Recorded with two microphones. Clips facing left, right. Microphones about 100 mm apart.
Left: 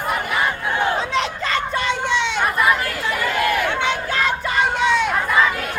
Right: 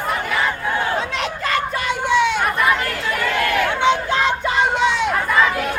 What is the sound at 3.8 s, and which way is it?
Crowd, 20° right (ahead or behind).